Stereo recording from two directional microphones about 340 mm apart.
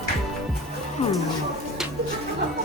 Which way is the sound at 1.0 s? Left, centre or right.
Centre.